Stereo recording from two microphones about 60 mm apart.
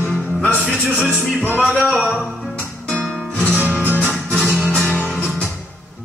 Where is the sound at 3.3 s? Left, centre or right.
Left.